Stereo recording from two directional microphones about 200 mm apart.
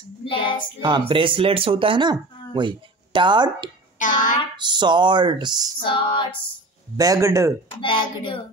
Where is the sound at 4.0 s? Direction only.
40° left (ahead or behind).